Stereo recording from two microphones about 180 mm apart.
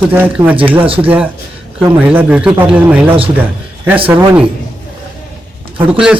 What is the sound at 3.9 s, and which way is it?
Speech, 30° right (ahead or behind).